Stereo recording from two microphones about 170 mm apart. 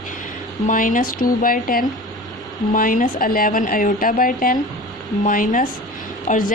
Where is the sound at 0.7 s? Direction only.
50° left (ahead or behind).